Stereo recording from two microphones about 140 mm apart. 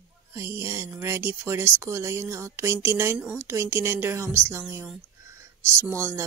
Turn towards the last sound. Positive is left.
turn(degrees=-20)  # may be behind; listen again after turning